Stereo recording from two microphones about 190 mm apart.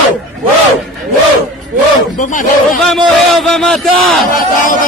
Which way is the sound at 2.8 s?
Centre (ahead or behind).